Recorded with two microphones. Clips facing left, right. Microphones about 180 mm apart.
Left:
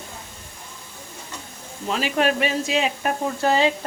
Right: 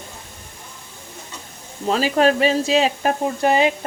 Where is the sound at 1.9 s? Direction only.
35° right (ahead or behind).